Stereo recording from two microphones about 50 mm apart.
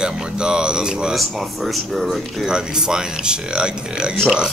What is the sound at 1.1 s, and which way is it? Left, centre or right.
Speech, centre.